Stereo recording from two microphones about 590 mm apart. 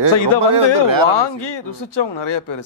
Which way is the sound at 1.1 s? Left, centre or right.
Left.